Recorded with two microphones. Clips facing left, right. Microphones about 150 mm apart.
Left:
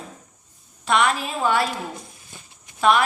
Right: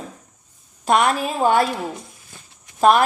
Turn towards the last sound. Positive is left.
turn(degrees=-45)  # may be behind; listen again after turning